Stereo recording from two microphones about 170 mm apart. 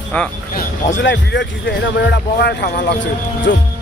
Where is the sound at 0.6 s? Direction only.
90° left.